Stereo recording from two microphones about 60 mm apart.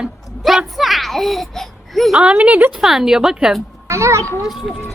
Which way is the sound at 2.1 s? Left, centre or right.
Centre.